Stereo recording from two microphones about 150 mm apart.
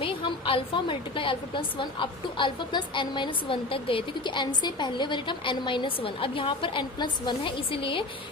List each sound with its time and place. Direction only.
0.0 s a woman's voice: 35° left (ahead or behind)